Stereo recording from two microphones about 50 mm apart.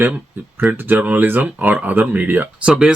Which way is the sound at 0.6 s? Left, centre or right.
Right.